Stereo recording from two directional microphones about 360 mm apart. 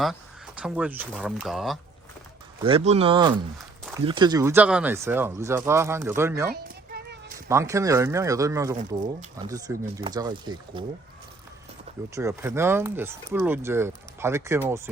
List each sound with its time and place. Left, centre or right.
0.0 s speech: centre
2.6 s speech: centre
6.5 s children playing: right
7.3 s speech: centre
12.1 s speech: centre